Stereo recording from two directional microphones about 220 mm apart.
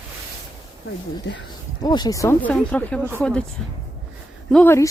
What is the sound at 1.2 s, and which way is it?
Speech, 55° left (ahead or behind).